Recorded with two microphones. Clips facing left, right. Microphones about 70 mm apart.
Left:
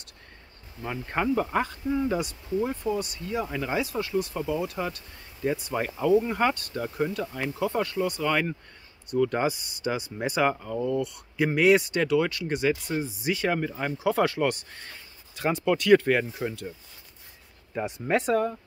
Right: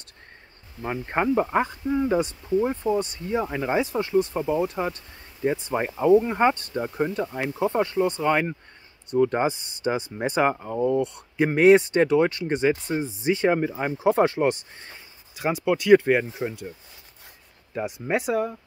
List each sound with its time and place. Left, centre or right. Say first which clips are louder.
0.8 s speech: right 3 dB; right
2.1 s speech: right 5 dB; right
13.9 s speech: right 4 dB; right
17.8 s speech: even; centre